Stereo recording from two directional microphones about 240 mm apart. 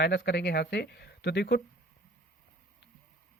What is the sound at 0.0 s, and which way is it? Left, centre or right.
Speech, left.